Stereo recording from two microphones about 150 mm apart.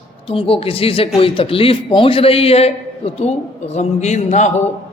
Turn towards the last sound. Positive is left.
turn(degrees=50)  # may be behind; listen again after turning